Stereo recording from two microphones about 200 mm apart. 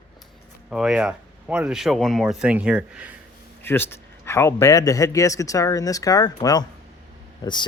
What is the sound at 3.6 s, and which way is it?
Speech, 10° left (ahead or behind).